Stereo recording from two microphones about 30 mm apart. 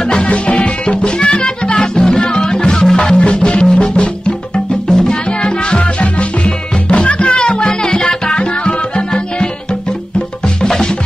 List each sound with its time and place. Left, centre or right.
0.2 s music: left
3.2 s music: left
4.8 s music: left